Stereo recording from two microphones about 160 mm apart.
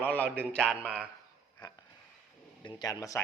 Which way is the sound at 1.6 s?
25° left (ahead or behind).